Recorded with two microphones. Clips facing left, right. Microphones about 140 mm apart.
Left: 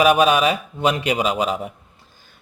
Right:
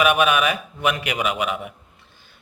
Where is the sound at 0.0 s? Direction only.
35° left (ahead or behind).